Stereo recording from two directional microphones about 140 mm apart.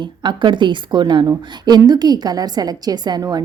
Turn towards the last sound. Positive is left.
turn(degrees=-30)  # may be behind; listen again after turning